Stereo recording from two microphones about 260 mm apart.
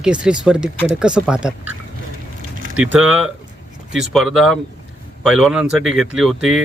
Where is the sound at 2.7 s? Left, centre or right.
Centre.